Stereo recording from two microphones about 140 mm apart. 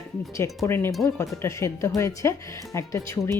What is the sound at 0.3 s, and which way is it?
Speech, 20° left (ahead or behind).